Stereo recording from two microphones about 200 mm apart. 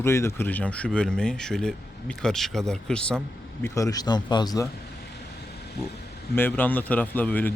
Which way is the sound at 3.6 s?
15° left (ahead or behind).